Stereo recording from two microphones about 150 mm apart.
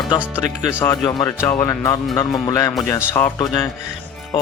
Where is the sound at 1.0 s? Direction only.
25° left (ahead or behind).